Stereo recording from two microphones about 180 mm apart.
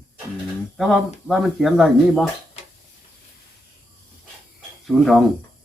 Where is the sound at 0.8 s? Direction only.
Centre (ahead or behind).